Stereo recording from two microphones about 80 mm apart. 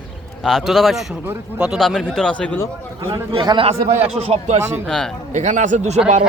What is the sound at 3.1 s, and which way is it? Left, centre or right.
Speech, right.